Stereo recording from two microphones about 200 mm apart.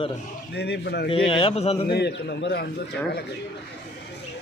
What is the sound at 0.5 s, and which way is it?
Speech, 55° left (ahead or behind).